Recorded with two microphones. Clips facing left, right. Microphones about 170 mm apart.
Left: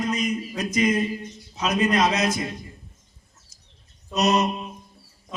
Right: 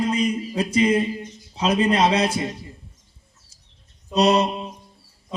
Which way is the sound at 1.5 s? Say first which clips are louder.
Right 2 dB; 30° right (ahead or behind).